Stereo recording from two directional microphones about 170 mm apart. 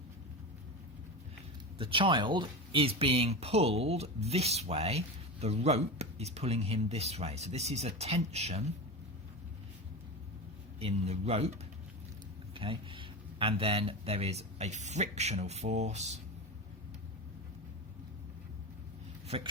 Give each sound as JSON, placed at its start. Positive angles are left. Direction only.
{"t": 1.8, "sound": "speech", "side_deg": -30}
{"t": 10.8, "sound": "speech", "side_deg": -35}
{"t": 12.5, "sound": "speech", "side_deg": -30}